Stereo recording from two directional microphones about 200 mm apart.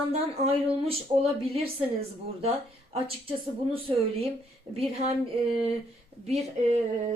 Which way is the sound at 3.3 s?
30° right (ahead or behind).